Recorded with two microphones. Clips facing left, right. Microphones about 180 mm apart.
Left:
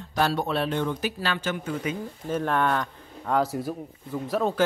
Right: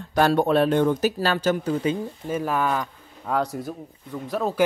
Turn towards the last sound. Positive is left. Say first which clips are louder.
# left 1 dB
turn(degrees=0)  # may be behind; listen again after turning